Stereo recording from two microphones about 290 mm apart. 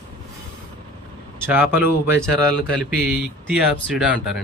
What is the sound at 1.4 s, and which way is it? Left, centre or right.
Speech, centre.